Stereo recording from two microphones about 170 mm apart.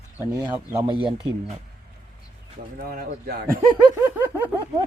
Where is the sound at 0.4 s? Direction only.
15° right (ahead or behind).